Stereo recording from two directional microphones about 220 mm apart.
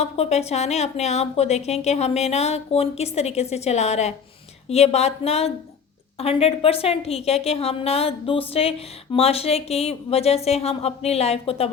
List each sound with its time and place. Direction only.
0.0 s a woman's voice: 30° left (ahead or behind)